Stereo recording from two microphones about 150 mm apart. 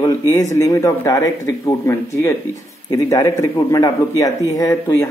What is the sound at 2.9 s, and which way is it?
Speech, 25° left (ahead or behind).